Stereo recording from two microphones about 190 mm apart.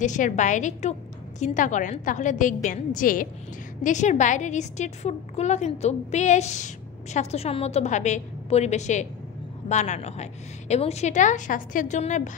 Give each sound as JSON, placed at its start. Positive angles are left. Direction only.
{"t": 0.0, "sound": "a woman's voice", "side_deg": 40}